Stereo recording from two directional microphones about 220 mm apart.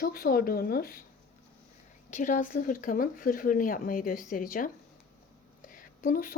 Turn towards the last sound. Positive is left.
turn(degrees=40)  # may be behind; listen again after turning